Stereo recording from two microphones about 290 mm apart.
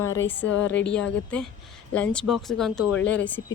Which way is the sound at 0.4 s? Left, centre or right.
Left.